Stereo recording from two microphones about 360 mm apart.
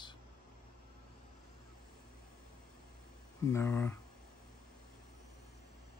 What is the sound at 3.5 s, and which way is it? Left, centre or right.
Speech, centre.